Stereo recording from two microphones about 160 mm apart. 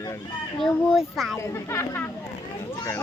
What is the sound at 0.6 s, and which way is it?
Speech, centre (ahead or behind).